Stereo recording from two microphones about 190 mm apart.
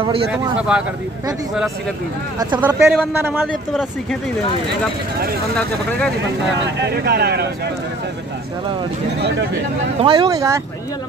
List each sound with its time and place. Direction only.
0.3 s speech: 5° right (ahead or behind)
2.6 s a man's voice: 10° right (ahead or behind)
5.6 s speech: 5° left (ahead or behind)
6.6 s speech: 65° right (ahead or behind)
10.0 s speech: 25° right (ahead or behind)